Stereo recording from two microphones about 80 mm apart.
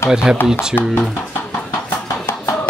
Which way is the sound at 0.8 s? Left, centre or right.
Left.